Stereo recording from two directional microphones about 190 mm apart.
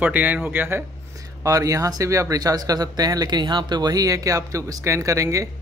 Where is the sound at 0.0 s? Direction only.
10° right (ahead or behind).